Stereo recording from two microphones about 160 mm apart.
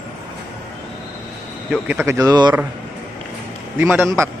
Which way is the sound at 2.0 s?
20° right (ahead or behind).